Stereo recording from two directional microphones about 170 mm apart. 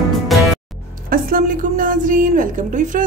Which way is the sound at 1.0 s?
55° right (ahead or behind).